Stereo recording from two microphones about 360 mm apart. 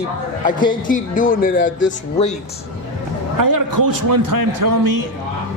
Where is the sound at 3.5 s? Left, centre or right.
Right.